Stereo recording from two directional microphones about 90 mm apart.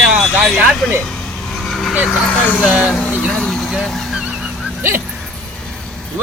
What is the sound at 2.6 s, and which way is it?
Speech, 5° right (ahead or behind).